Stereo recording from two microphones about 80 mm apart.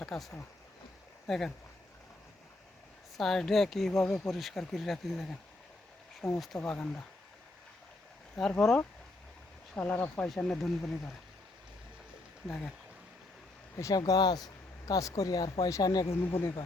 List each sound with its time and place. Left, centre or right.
0.0 s a sound: centre
1.3 s speech: centre
3.2 s speech: centre
6.6 s speech: centre
8.4 s speech: centre
10.2 s speech: centre
12.5 s speech: centre
13.7 s speech: left
14.0 s speech: left
16.2 s speech: left